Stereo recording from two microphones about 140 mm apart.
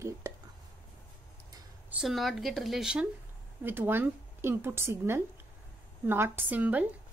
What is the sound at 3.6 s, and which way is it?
A woman's voice, 15° right (ahead or behind).